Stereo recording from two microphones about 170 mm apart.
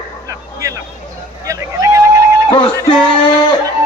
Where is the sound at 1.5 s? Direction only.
20° right (ahead or behind).